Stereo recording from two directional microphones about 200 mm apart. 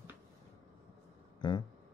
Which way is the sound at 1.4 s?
20° left (ahead or behind).